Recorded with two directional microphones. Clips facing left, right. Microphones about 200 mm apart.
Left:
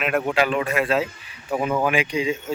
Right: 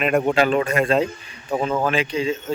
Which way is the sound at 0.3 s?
35° right (ahead or behind).